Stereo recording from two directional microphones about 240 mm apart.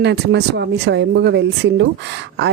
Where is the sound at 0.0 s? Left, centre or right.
Right.